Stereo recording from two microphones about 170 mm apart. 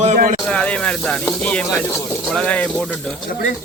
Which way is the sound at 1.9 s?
Centre (ahead or behind).